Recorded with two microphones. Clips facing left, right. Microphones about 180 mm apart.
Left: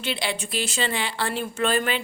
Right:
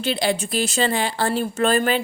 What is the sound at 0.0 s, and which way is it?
Speech, 40° right (ahead or behind).